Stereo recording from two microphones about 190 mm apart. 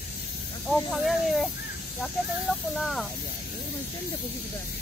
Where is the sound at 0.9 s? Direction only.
Centre (ahead or behind).